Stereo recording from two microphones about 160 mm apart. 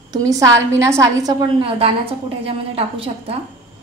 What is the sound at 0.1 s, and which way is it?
A woman's voice, 20° right (ahead or behind).